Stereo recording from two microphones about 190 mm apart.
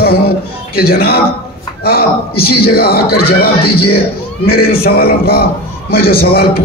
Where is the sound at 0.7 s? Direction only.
55° left (ahead or behind).